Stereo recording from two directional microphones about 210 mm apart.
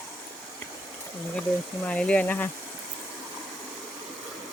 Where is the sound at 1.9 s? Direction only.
5° left (ahead or behind).